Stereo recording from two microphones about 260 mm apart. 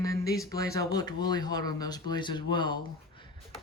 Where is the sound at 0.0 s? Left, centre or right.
Centre.